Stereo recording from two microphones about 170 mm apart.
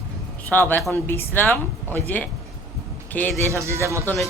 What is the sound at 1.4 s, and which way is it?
Speech, centre (ahead or behind).